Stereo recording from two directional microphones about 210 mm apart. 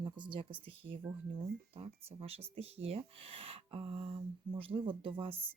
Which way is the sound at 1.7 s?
30° right (ahead or behind).